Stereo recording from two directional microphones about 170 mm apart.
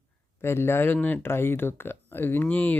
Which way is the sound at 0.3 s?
15° left (ahead or behind).